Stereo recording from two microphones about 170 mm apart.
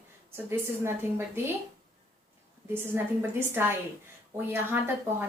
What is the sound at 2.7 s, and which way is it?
A woman's voice, 15° right (ahead or behind).